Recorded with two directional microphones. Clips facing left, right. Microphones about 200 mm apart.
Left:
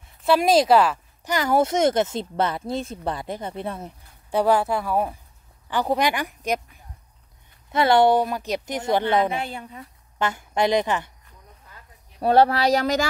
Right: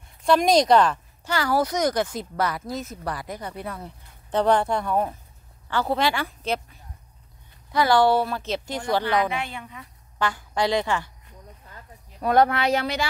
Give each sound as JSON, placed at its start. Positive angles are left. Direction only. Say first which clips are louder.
{"t": 0.0, "sound": "a sound", "louder": "even", "side_deg": 5}
{"t": 1.3, "sound": "speech", "louder": "left 3 dB", "side_deg": 20}
{"t": 4.3, "sound": "a woman's voice", "louder": "left 1 dB", "side_deg": 10}
{"t": 7.7, "sound": "speech", "louder": "left 2 dB", "side_deg": 25}
{"t": 10.1, "sound": "a woman's voice", "louder": "left 2 dB", "side_deg": 20}
{"t": 12.2, "sound": "speech", "louder": "left 2 dB", "side_deg": 30}